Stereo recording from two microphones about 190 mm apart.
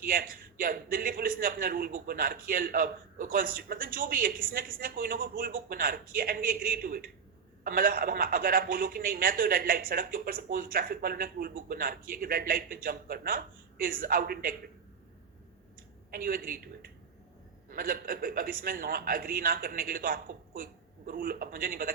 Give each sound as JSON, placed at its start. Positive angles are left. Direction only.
{"t": 0.0, "sound": "a man's voice", "side_deg": -50}
{"t": 16.1, "sound": "a man's voice", "side_deg": -50}